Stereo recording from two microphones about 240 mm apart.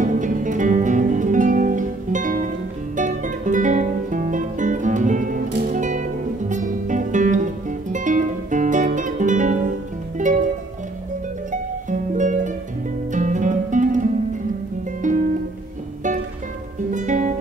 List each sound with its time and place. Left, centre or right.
0.0 s music: right
11.5 s music: right
15.0 s music: right
16.9 s music: right